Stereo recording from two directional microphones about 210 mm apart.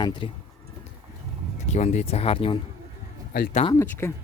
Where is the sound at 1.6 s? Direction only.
35° left (ahead or behind).